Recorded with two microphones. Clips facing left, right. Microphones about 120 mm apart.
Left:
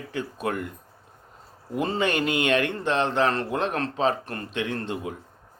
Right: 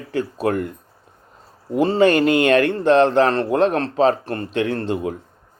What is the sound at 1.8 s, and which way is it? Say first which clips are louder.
Speech: right 10 dB; 35° right (ahead or behind).